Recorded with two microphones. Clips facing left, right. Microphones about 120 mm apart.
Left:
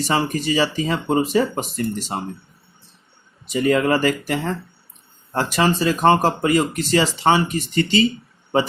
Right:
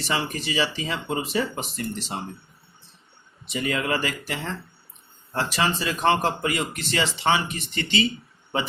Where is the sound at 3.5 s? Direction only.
40° left (ahead or behind).